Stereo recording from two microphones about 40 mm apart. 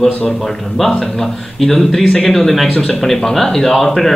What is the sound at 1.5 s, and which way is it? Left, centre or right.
Speech, centre.